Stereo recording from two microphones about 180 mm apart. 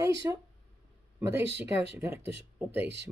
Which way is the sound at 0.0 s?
15° right (ahead or behind).